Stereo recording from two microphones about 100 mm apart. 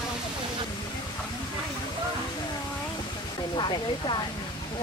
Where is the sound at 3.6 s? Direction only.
50° left (ahead or behind).